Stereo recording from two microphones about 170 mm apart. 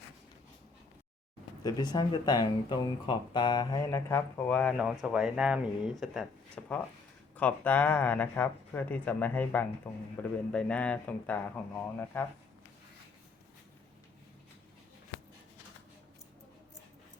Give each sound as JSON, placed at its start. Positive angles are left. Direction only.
{"t": 1.6, "sound": "speech", "side_deg": 25}
{"t": 3.9, "sound": "speech", "side_deg": 15}